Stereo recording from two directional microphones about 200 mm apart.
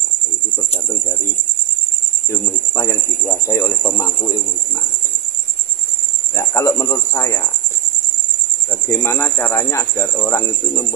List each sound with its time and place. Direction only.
2.2 s speech: 15° left (ahead or behind)
6.3 s speech: 15° left (ahead or behind)
8.6 s speech: 15° left (ahead or behind)